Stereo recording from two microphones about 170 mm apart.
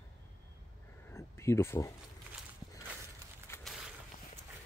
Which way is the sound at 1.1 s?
15° left (ahead or behind).